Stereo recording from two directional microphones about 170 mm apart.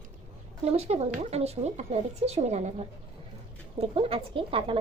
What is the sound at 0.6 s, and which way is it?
A woman's voice, 40° right (ahead or behind).